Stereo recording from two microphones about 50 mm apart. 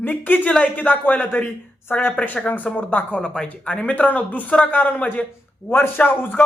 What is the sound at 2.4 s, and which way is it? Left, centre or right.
A man's voice, left.